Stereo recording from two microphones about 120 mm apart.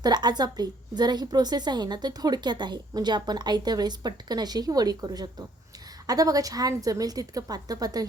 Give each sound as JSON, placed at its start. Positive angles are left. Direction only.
{"t": 0.0, "sound": "a woman's voice", "side_deg": -35}